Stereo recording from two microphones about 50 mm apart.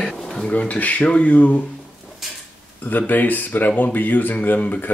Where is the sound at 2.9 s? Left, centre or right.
Left.